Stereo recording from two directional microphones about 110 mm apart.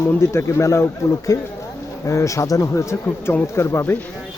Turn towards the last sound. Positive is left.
turn(degrees=25)  # may be behind; listen again after turning